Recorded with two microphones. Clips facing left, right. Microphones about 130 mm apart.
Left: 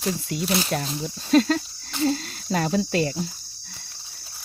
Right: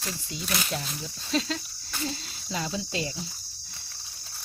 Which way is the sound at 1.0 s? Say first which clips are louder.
Left 12 dB; 50° left (ahead or behind).